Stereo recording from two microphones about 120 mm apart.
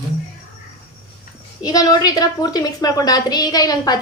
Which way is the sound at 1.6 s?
30° left (ahead or behind).